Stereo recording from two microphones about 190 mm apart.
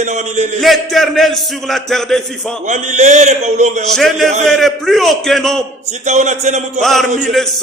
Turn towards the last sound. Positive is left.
turn(degrees=0)  # may be behind; listen again after turning